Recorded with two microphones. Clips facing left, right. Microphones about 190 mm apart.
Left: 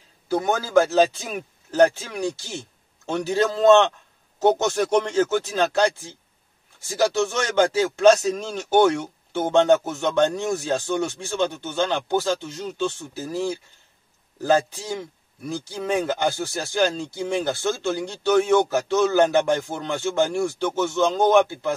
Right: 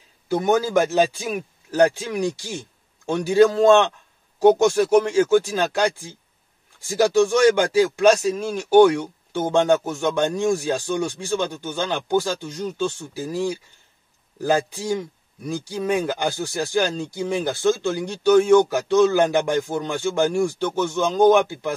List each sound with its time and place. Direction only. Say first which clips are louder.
0.3 s speech: right 2 dB; 15° right (ahead or behind)